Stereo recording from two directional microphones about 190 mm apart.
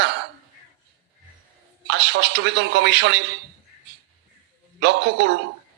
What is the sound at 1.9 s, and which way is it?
A man's voice, 65° right (ahead or behind).